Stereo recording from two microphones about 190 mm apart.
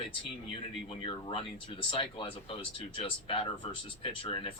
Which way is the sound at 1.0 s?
30° left (ahead or behind).